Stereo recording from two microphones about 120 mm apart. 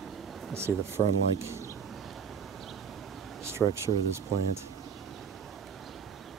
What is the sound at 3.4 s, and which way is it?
Speech, 20° right (ahead or behind).